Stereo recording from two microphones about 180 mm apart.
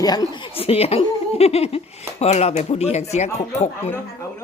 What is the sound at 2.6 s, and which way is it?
Speech, 35° left (ahead or behind).